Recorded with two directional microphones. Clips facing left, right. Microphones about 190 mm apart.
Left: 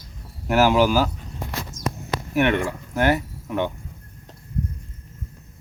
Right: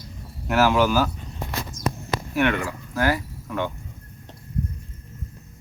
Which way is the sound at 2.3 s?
20° left (ahead or behind).